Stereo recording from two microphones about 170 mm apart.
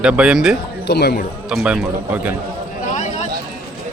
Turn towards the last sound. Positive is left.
turn(degrees=45)  # may be behind; listen again after turning